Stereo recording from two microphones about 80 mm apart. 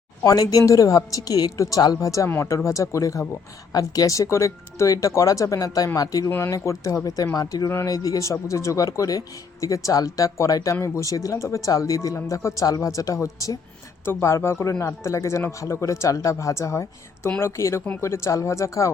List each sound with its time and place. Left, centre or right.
0.2 s speech: left
7.3 s speech: left
7.7 s speech: left
7.9 s speech: left
14.0 s speech: left